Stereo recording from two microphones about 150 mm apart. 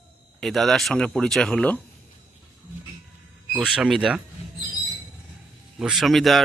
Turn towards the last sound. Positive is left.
turn(degrees=0)  # may be behind; listen again after turning